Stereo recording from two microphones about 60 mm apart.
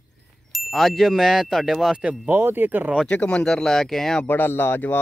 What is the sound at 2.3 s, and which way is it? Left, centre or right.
Speech, right.